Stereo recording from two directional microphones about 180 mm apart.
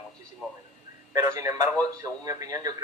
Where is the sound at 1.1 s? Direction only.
20° right (ahead or behind).